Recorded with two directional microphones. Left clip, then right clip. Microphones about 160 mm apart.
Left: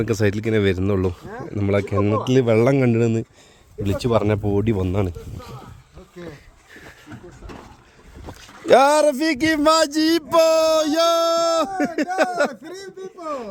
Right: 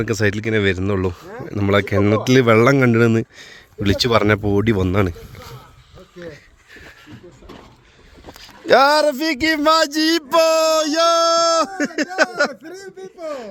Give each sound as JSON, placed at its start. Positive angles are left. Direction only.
{"t": 0.0, "sound": "speech", "side_deg": 10}
{"t": 2.0, "sound": "speech", "side_deg": -20}
{"t": 8.3, "sound": "speech", "side_deg": 15}